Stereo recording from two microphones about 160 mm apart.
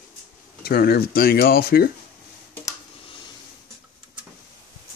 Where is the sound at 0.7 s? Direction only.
75° left (ahead or behind).